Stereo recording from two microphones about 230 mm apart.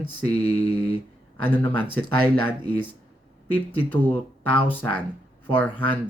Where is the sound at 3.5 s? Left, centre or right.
Centre.